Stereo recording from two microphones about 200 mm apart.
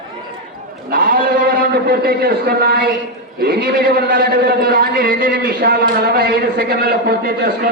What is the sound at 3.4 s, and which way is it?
A man's voice, 50° right (ahead or behind).